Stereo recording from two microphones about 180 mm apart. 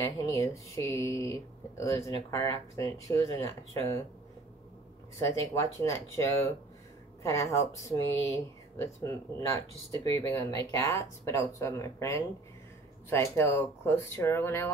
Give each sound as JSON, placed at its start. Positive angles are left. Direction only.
{"t": 0.2, "sound": "speech", "side_deg": 15}
{"t": 5.2, "sound": "speech", "side_deg": 15}